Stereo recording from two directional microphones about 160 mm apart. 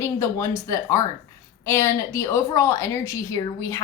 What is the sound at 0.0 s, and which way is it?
A woman's voice, 20° left (ahead or behind).